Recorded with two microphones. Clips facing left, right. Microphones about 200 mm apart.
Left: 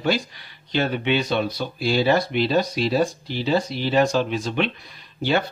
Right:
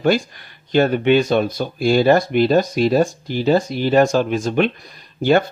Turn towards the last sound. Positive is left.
turn(degrees=-50)  # may be behind; listen again after turning